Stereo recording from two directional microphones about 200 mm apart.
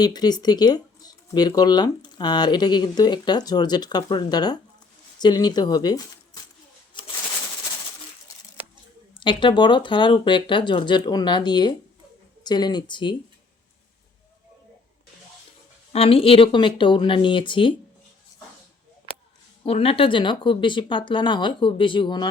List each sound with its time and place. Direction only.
0.0 s speech: 20° left (ahead or behind)
7.0 s a sound: 25° left (ahead or behind)
9.2 s speech: 25° left (ahead or behind)
15.9 s speech: 30° left (ahead or behind)
19.6 s speech: 30° left (ahead or behind)